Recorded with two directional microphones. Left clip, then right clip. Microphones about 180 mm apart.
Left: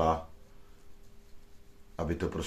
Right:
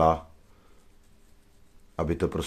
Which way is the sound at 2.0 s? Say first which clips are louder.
Right 6 dB; 65° right (ahead or behind).